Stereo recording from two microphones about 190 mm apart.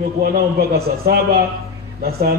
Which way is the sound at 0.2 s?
55° right (ahead or behind).